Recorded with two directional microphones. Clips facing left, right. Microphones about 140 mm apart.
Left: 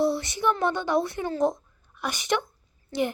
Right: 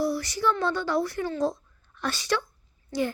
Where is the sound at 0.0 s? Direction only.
25° left (ahead or behind).